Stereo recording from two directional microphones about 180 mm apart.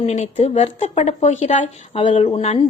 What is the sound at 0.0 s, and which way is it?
Speech, 40° left (ahead or behind).